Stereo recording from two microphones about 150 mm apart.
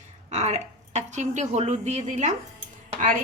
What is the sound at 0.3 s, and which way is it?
Speech, 50° right (ahead or behind).